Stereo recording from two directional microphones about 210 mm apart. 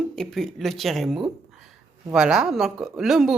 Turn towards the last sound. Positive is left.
turn(degrees=0)  # may be behind; listen again after turning